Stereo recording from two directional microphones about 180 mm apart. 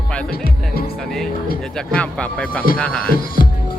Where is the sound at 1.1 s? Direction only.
Centre (ahead or behind).